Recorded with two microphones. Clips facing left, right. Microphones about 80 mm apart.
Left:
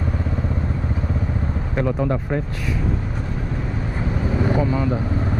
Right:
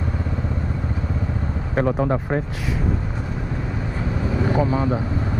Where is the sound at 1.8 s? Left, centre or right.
Right.